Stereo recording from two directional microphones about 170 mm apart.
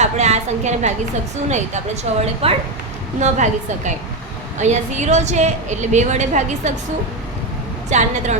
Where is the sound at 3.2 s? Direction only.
45° right (ahead or behind).